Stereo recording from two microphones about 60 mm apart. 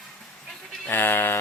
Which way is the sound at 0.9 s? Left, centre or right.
Left.